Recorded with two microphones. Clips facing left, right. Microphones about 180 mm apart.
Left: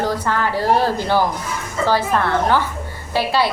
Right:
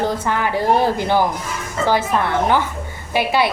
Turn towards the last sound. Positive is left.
turn(degrees=-15)  # may be behind; listen again after turning